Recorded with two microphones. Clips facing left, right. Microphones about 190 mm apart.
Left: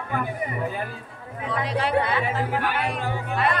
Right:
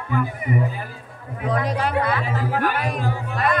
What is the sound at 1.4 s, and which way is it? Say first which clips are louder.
A man's voice: right 3 dB; 45° right (ahead or behind).